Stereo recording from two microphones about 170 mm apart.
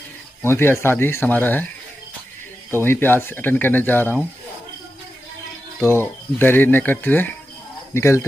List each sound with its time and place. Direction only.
0.4 s speech: 15° left (ahead or behind)
2.7 s speech: 15° left (ahead or behind)
5.8 s speech: 15° left (ahead or behind)